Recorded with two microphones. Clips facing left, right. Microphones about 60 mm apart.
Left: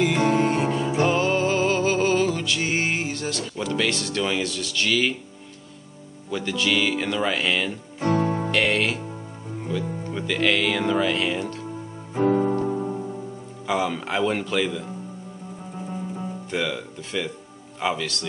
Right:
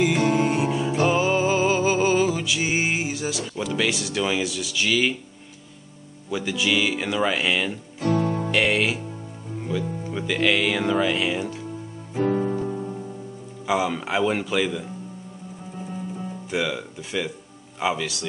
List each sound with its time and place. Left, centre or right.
0.3 s music: centre
6.3 s speech: centre
8.0 s music: left
8.5 s speech: centre
10.0 s speech: centre
12.3 s music: centre
13.7 s speech: centre
16.5 s speech: centre